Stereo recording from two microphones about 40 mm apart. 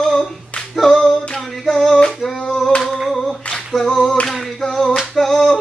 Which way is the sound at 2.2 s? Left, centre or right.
Centre.